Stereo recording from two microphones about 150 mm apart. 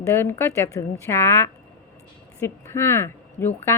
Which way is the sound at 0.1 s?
15° left (ahead or behind).